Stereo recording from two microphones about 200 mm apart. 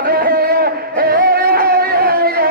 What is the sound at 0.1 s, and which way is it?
Music, 50° right (ahead or behind).